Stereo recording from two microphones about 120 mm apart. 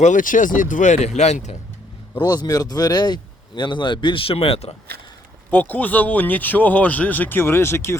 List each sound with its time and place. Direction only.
0.0 s speech: 90° left; by 1.5 s 70° left (ahead or behind)
2.1 s speech: 35° left (ahead or behind); by 4.7 s 55° left (ahead or behind)
5.5 s speech: 15° left (ahead or behind)